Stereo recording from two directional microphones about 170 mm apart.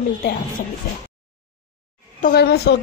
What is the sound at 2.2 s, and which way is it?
Speech, 65° left (ahead or behind).